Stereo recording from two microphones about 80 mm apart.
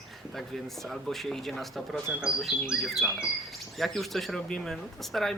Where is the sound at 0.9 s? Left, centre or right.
Centre.